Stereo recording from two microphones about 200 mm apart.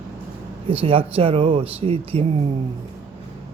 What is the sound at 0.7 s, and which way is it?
Speech, 25° right (ahead or behind).